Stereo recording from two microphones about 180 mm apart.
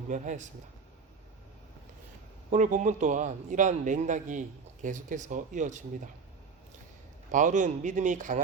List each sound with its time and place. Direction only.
0.1 s a man's voice: 45° right (ahead or behind)
2.5 s a man's voice: 45° right (ahead or behind)
7.3 s a man's voice: 45° right (ahead or behind)